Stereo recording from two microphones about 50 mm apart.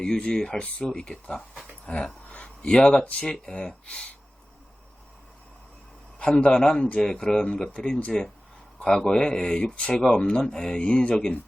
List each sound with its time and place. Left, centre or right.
0.0 s speech: centre
1.9 s speech: left
6.1 s a man's voice: left
6.6 s speech: centre
10.8 s speech: left